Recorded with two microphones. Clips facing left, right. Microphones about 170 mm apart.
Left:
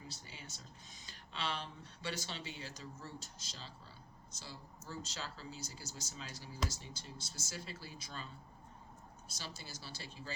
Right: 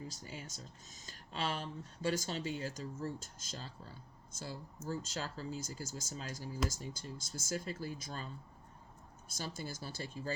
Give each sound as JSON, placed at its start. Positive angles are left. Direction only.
{"t": 0.1, "sound": "speech", "side_deg": -45}
{"t": 9.3, "sound": "speech", "side_deg": -50}